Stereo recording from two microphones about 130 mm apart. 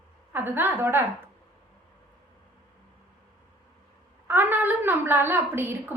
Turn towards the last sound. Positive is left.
turn(degrees=-15)  # may be behind; listen again after turning